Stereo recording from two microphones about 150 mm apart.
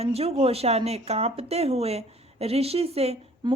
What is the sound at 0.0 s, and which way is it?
Speech, 45° right (ahead or behind).